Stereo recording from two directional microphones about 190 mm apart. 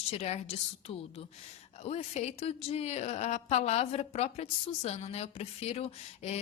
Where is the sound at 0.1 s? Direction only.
30° left (ahead or behind).